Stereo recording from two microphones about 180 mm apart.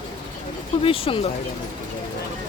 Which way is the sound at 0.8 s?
30° left (ahead or behind).